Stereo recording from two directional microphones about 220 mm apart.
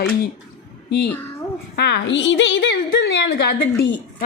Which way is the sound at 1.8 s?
50° left (ahead or behind).